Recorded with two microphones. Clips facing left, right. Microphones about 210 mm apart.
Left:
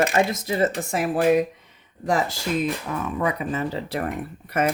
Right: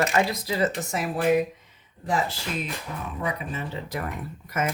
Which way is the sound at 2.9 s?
70° left (ahead or behind).